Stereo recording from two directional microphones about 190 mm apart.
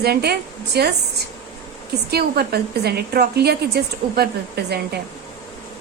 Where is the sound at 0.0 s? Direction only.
55° right (ahead or behind).